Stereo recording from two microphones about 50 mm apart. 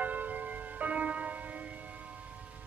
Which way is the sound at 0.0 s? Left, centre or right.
Right.